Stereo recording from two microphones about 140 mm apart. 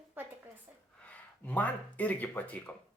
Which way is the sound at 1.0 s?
10° left (ahead or behind).